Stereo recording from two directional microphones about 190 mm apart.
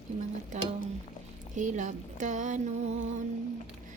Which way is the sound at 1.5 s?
40° right (ahead or behind).